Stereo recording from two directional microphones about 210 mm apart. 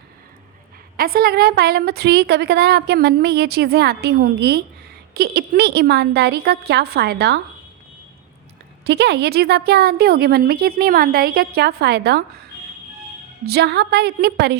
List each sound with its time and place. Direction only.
0.9 s a woman's voice: 45° right (ahead or behind)
8.8 s a woman's voice: 55° right (ahead or behind)
13.4 s a woman's voice: 50° right (ahead or behind)